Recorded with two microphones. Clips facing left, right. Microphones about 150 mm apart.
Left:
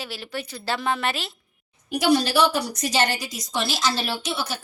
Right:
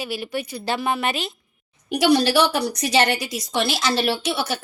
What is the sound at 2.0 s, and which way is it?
Speech, 75° right (ahead or behind).